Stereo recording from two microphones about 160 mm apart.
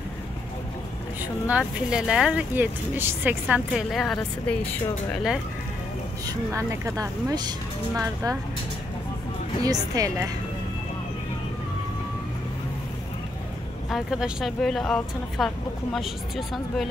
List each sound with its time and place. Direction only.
1.2 s a woman's voice: 5° right (ahead or behind)
6.2 s speech: 20° right (ahead or behind)
9.6 s speech: 20° right (ahead or behind)
13.8 s a woman's voice: centre (ahead or behind)